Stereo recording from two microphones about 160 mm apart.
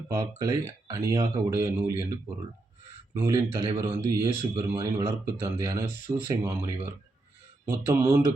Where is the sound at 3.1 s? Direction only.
20° right (ahead or behind).